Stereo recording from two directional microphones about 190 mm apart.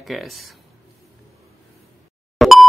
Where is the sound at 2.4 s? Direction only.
Centre (ahead or behind).